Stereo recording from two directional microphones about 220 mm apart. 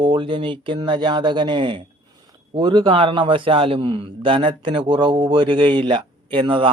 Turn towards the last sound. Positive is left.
turn(degrees=-25)  # may be behind; listen again after turning